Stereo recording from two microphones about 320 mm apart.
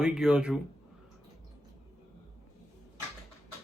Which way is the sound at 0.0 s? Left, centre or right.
Centre.